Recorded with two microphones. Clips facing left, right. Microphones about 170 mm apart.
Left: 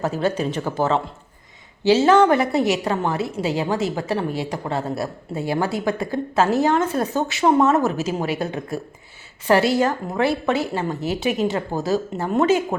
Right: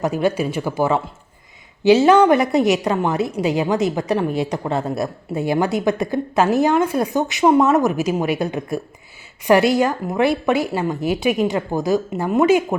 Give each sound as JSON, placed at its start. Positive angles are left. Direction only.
{"t": 0.0, "sound": "a woman's voice", "side_deg": -15}